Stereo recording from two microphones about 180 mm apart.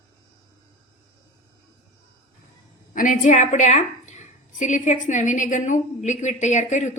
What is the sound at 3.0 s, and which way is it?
A woman's voice, 45° left (ahead or behind).